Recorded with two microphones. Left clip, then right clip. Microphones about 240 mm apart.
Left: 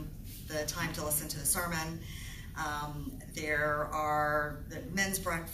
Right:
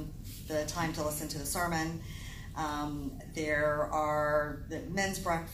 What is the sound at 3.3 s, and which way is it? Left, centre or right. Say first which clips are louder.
Speech: right 1 dB; left.